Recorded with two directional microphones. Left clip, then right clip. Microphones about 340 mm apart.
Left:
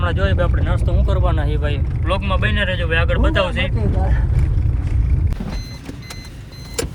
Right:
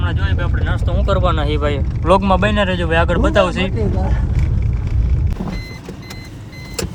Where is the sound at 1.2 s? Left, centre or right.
Right.